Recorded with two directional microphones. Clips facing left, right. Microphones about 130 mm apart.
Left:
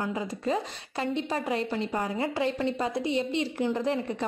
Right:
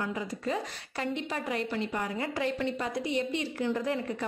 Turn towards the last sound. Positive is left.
turn(degrees=25)  # may be behind; listen again after turning